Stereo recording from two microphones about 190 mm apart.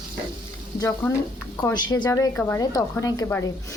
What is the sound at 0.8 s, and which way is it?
Speech, 15° left (ahead or behind).